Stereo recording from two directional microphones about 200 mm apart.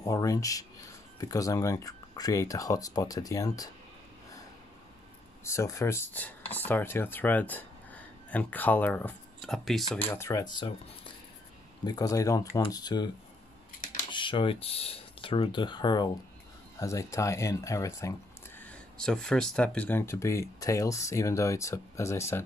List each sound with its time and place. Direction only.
0.0 s speech: 15° left (ahead or behind)
5.4 s speech: 15° left (ahead or behind)
14.1 s speech: 25° left (ahead or behind)